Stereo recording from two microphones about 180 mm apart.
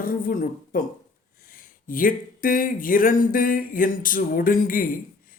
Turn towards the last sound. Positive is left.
turn(degrees=50)  # may be behind; listen again after turning